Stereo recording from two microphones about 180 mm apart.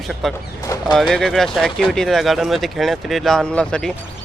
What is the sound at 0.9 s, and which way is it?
Speech, centre (ahead or behind).